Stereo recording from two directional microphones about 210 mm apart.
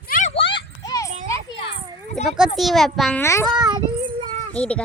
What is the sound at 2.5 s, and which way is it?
Speech, centre (ahead or behind).